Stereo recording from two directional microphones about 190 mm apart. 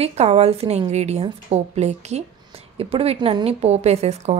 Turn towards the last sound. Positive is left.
turn(degrees=-35)  # may be behind; listen again after turning